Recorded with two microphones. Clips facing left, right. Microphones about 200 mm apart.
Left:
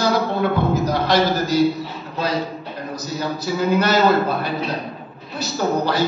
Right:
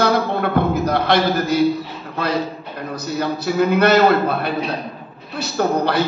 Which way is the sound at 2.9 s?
60° right (ahead or behind).